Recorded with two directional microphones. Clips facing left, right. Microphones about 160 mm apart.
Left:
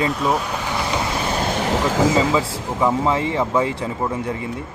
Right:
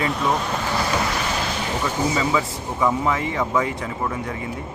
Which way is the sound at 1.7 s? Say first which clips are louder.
Left 5 dB; 90° left.